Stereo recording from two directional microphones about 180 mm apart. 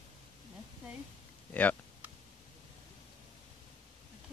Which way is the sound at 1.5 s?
10° left (ahead or behind).